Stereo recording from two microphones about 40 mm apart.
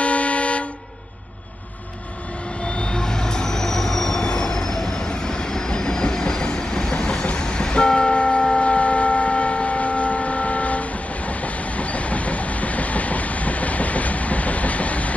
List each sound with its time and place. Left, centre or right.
0.0 s vehicle: left
2.8 s train: centre
4.3 s vehicle: centre; by 15.1 s left